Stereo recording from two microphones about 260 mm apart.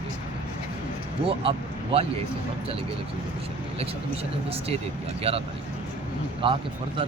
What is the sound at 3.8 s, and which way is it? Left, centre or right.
Speech, right.